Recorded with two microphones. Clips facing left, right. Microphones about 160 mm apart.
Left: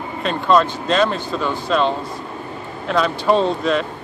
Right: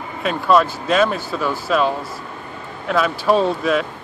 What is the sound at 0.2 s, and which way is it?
Speech, 5° right (ahead or behind).